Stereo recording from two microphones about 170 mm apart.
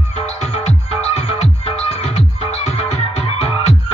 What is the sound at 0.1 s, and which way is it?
Music, 40° left (ahead or behind).